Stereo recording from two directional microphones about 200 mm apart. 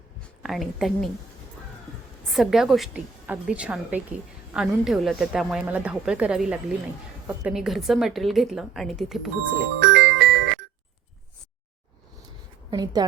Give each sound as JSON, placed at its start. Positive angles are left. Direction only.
{"t": 0.2, "sound": "speech", "side_deg": 0}
{"t": 2.3, "sound": "a woman's voice", "side_deg": 0}
{"t": 9.8, "sound": "music", "side_deg": -65}
{"t": 12.7, "sound": "a woman's voice", "side_deg": -20}